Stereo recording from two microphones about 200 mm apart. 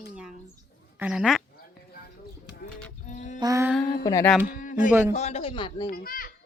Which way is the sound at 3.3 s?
15° right (ahead or behind).